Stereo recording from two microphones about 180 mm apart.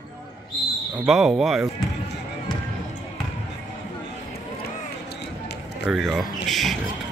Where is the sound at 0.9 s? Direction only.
Centre (ahead or behind).